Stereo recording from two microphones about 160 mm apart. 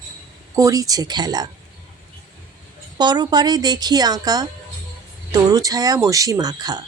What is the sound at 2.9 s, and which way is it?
A woman's voice, 25° right (ahead or behind).